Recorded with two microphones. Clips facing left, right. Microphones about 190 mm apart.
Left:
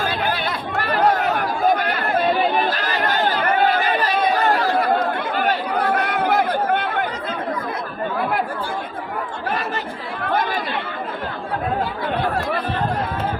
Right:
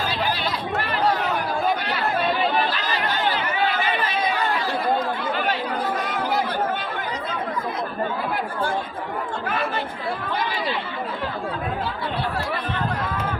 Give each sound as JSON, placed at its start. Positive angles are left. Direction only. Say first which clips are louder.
{"t": 0.0, "sound": "chatter", "louder": "left 2 dB", "side_deg": 50}
{"t": 4.8, "sound": "chatter", "louder": "left 3 dB", "side_deg": 60}